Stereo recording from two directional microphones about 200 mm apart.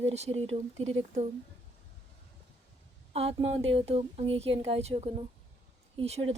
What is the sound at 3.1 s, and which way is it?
A woman's voice, 30° right (ahead or behind).